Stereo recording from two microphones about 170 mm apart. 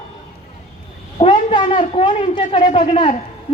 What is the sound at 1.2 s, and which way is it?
Speech, 40° left (ahead or behind).